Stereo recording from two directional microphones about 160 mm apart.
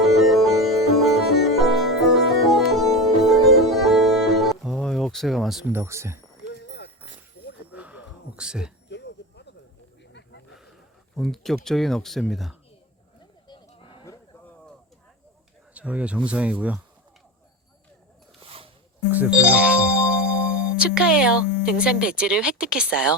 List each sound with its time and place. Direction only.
0.0 s music: centre (ahead or behind)
5.7 s speech: 15° right (ahead or behind)
6.4 s clip-clop: 90° left
7.7 s a sound: 10° right (ahead or behind)
8.9 s a sound: 90° left
10.1 s snake: 90° left
11.2 s speech: centre (ahead or behind)
13.5 s sheep: 25° left (ahead or behind)
15.7 s speech: 10° right (ahead or behind)
18.3 s a sound: 35° right (ahead or behind)
19.1 s speech: 10° right (ahead or behind)